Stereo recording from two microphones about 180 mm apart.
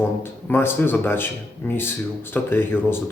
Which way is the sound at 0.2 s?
10° left (ahead or behind).